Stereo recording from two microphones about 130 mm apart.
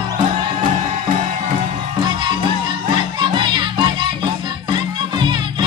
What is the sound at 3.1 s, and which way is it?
Music, 35° right (ahead or behind).